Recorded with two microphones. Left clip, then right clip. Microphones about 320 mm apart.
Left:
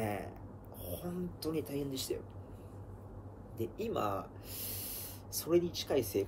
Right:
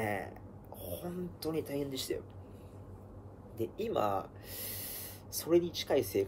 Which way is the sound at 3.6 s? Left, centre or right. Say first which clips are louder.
Right 3 dB; centre.